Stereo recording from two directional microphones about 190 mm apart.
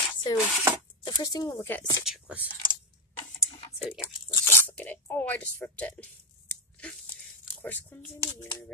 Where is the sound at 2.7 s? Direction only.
25° right (ahead or behind).